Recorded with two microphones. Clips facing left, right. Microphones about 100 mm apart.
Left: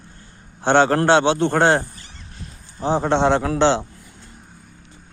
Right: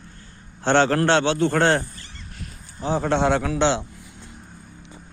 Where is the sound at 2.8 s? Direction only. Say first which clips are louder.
Left 3 dB; 30° left (ahead or behind).